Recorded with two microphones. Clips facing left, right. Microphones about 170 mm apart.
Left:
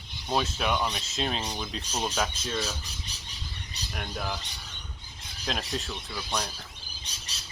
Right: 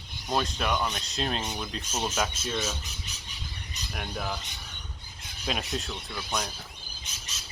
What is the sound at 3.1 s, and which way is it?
Squawk, 35° left (ahead or behind).